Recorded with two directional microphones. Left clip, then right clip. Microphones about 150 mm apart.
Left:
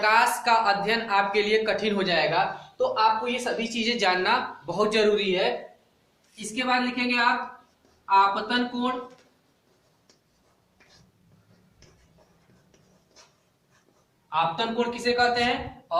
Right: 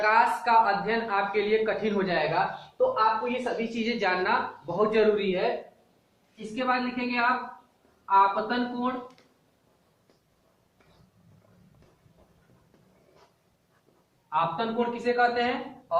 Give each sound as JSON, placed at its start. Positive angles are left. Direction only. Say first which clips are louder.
{"t": 0.0, "sound": "speech", "louder": "left 1 dB", "side_deg": 30}
{"t": 6.5, "sound": "speech", "louder": "left 2 dB", "side_deg": 35}
{"t": 14.3, "sound": "speech", "louder": "left 2 dB", "side_deg": 35}